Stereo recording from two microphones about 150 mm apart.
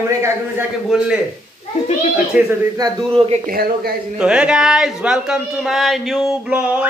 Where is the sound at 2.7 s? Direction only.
25° right (ahead or behind).